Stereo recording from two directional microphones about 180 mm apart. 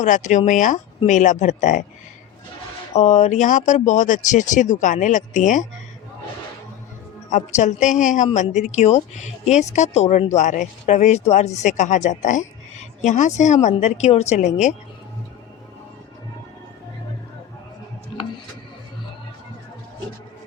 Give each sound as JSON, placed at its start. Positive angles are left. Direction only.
{"t": 0.0, "sound": "speech", "side_deg": 40}
{"t": 2.9, "sound": "speech", "side_deg": 40}
{"t": 7.3, "sound": "a woman's voice", "side_deg": 40}